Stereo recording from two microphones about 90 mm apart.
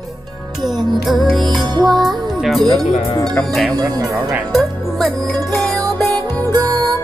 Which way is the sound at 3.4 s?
Centre (ahead or behind).